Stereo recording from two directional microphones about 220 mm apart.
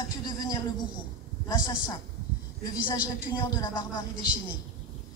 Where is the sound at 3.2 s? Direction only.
20° left (ahead or behind).